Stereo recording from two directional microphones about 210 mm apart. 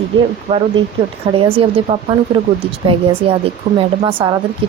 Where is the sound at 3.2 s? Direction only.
25° right (ahead or behind).